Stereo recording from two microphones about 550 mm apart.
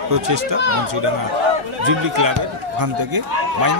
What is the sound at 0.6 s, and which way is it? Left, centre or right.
Speech, right.